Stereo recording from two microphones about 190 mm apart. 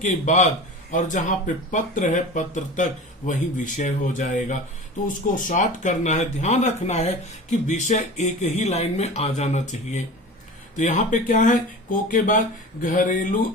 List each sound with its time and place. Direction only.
0.0 s speech: 40° left (ahead or behind)